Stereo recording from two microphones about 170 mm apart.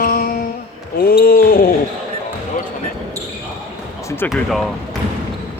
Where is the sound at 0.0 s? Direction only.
60° left (ahead or behind).